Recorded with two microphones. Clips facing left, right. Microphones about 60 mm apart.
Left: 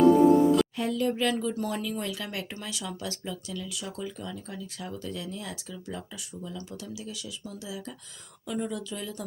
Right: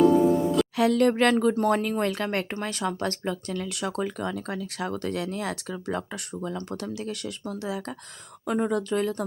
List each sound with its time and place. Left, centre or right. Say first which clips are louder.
0.0 s music: left 1 dB; centre
0.8 s speech: right 7 dB; right